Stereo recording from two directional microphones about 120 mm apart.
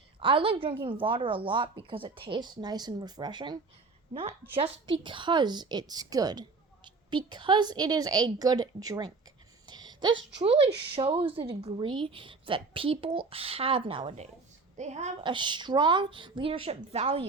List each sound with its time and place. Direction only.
0.2 s a woman's voice: 45° right (ahead or behind)
4.1 s a woman's voice: 50° right (ahead or behind); by 9.1 s 35° right (ahead or behind)
9.6 s a sound: 35° right (ahead or behind)
10.4 s a woman's voice: 50° right (ahead or behind)
14.8 s a woman's voice: 70° right (ahead or behind)
15.2 s a woman's voice: 40° right (ahead or behind); by 17.2 s 55° right (ahead or behind)